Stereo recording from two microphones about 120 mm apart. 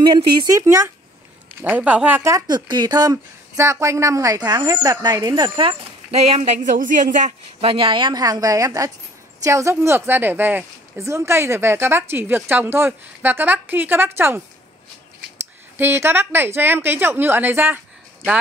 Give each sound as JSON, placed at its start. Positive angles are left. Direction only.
{"t": 0.0, "sound": "speech", "side_deg": -35}
{"t": 1.6, "sound": "a woman's voice", "side_deg": -10}
{"t": 2.2, "sound": "speech", "side_deg": -35}
{"t": 6.1, "sound": "speech", "side_deg": -60}
{"t": 7.6, "sound": "speech", "side_deg": -45}
{"t": 15.8, "sound": "a woman's voice", "side_deg": -20}